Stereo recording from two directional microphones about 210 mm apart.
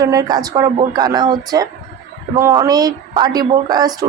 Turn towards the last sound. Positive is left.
turn(degrees=-20)  # may be behind; listen again after turning